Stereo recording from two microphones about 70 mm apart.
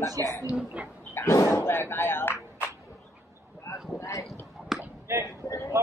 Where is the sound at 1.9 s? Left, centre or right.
Left.